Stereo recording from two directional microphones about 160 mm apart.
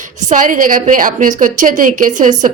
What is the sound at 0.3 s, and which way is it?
A woman's voice, 55° right (ahead or behind).